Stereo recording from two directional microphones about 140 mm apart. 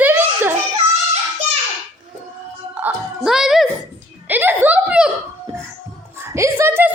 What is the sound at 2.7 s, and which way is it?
Music, 5° right (ahead or behind).